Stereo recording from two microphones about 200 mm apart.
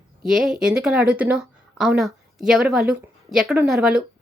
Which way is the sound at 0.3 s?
Centre (ahead or behind).